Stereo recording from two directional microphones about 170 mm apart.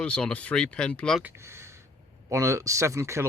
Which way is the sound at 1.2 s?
15° right (ahead or behind).